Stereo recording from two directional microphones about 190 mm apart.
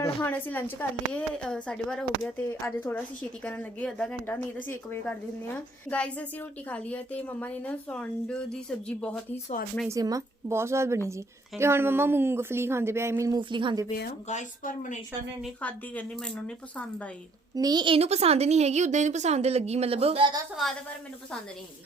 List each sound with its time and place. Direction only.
0.2 s a woman's voice: 10° left (ahead or behind)
9.9 s a woman's voice: 20° right (ahead or behind)
14.0 s speech: 40° left (ahead or behind)
15.6 s a woman's voice: 5° left (ahead or behind)
17.5 s a woman's voice: 20° right (ahead or behind)